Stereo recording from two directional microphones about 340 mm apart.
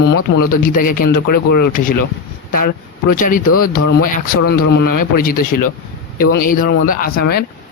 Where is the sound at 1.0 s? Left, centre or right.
Left.